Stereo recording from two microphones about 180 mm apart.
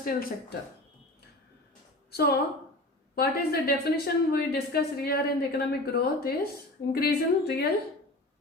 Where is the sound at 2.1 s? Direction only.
60° left (ahead or behind).